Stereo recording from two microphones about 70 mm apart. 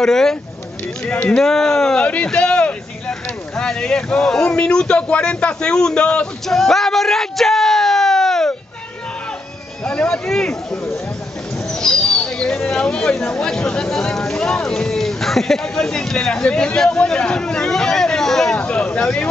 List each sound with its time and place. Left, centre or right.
0.0 s speech: centre
9.8 s speech: centre
11.7 s a sound: centre
13.3 s speech: centre
18.6 s speech: centre